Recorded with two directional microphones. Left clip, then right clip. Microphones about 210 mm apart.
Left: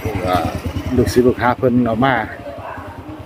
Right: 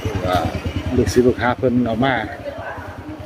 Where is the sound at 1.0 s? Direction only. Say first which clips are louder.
Left 2 dB; 10° left (ahead or behind).